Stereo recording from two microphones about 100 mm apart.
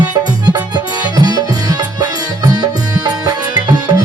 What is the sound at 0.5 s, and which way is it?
Music, 40° right (ahead or behind).